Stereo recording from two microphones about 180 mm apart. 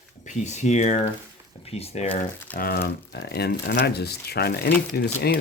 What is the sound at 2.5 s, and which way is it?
Speech, 55° left (ahead or behind).